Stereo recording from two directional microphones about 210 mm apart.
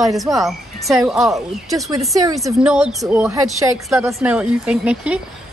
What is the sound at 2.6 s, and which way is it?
Speech, 5° right (ahead or behind).